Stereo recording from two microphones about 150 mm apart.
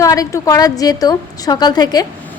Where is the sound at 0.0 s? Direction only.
20° left (ahead or behind).